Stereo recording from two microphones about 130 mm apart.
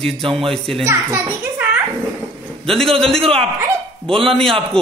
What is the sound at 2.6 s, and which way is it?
Speech, centre (ahead or behind).